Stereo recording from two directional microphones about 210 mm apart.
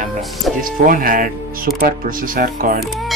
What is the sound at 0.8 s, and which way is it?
Speech, 40° right (ahead or behind).